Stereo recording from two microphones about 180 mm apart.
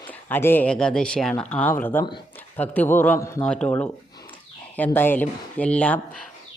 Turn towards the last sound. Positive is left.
turn(degrees=5)  # may be behind; listen again after turning